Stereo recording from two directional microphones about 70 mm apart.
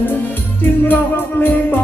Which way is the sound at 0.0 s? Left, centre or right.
Left.